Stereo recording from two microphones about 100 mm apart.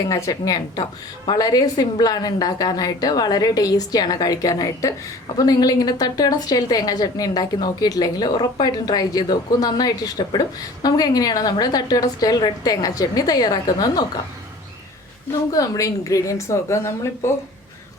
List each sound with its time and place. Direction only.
0.0 s a woman's voice: 35° left (ahead or behind)
15.5 s a woman's voice: 35° left (ahead or behind)